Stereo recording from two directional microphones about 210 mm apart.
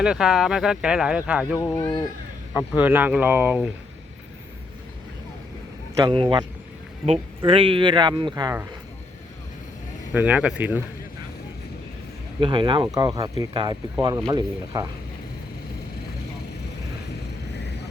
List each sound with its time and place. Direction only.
0.0 s speech: 5° right (ahead or behind)
1.5 s speech: 10° left (ahead or behind)
2.6 s speech: 5° right (ahead or behind)
6.0 s speech: 20° right (ahead or behind)
10.1 s speech: 5° right (ahead or behind)
12.4 s speech: 20° right (ahead or behind)